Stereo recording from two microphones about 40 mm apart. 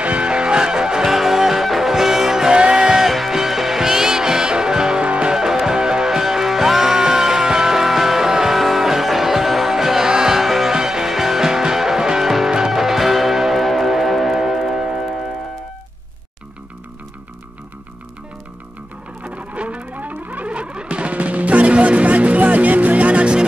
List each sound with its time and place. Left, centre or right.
0.0 s music: right
5.3 s music: centre
19.2 s music: right
20.4 s music: right